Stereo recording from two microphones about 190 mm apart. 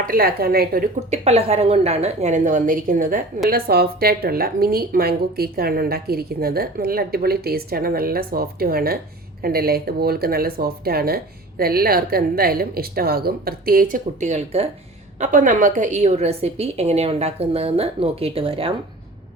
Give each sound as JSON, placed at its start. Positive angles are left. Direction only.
{"t": 0.0, "sound": "a woman's voice", "side_deg": -50}
{"t": 1.1, "sound": "a woman's voice", "side_deg": -35}